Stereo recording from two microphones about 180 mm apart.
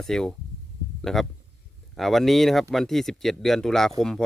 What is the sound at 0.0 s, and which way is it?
Speech, 5° left (ahead or behind).